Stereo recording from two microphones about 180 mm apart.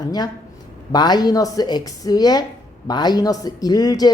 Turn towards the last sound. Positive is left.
turn(degrees=20)  # may be behind; listen again after turning